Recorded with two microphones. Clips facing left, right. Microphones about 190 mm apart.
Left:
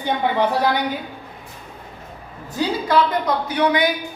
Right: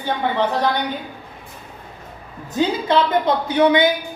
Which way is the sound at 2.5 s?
20° right (ahead or behind).